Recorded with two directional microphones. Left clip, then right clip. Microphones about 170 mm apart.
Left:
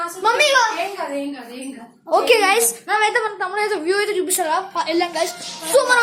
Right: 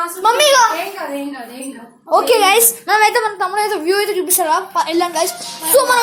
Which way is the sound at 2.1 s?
10° left (ahead or behind).